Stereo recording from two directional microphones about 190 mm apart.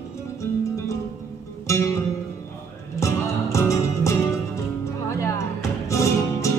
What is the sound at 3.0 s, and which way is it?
Music, 15° left (ahead or behind).